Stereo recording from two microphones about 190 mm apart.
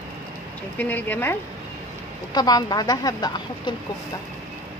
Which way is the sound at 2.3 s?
20° left (ahead or behind).